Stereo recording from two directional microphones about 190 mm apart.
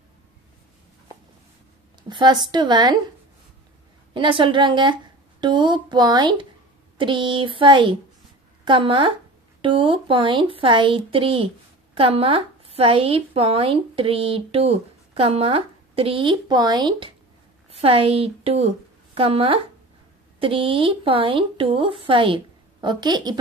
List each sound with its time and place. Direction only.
2.0 s speech: 25° right (ahead or behind)
4.1 s a woman's voice: 25° right (ahead or behind)